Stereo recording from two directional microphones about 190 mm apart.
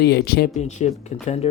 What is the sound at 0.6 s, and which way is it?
Speech, 40° left (ahead or behind).